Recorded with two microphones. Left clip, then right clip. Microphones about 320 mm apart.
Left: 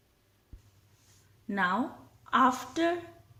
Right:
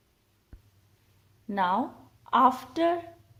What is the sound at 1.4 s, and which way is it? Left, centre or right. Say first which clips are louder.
Speech: right 3 dB; centre.